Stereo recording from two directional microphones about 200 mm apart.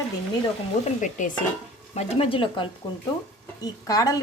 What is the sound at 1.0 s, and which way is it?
Stir, 40° left (ahead or behind).